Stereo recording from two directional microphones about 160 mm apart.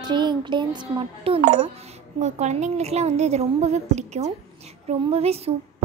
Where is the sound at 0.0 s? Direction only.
30° right (ahead or behind).